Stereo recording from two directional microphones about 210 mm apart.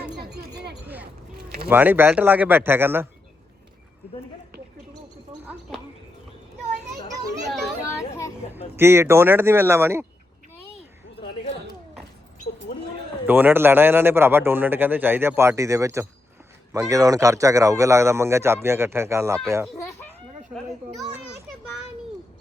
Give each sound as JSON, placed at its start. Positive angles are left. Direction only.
{"t": 0.3, "sound": "a sound", "side_deg": -50}
{"t": 1.7, "sound": "a man's voice", "side_deg": -10}
{"t": 7.8, "sound": "children playing", "side_deg": 15}
{"t": 8.5, "sound": "a man's voice", "side_deg": -10}
{"t": 13.2, "sound": "a man's voice", "side_deg": -10}
{"t": 19.6, "sound": "speech", "side_deg": 0}